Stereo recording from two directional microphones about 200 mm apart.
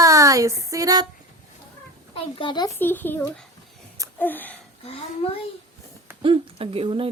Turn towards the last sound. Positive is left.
turn(degrees=-30)  # may be behind; listen again after turning